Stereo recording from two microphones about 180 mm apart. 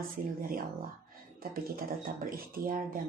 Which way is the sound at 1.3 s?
55° right (ahead or behind).